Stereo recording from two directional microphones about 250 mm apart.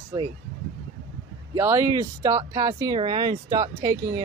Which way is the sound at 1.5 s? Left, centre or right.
Centre.